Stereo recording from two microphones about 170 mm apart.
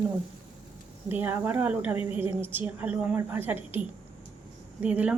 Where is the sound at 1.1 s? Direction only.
10° right (ahead or behind).